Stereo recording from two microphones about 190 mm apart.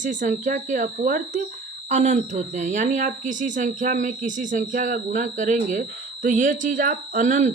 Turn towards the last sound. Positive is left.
turn(degrees=-40)  # may be behind; listen again after turning